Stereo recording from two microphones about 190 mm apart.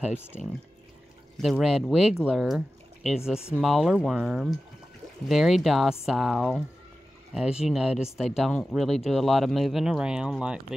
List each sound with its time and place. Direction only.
0.3 s speech: 35° left (ahead or behind)
1.4 s speech: centre (ahead or behind)